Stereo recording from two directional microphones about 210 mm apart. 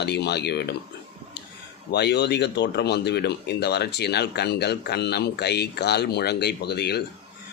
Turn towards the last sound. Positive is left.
turn(degrees=50)  # may be behind; listen again after turning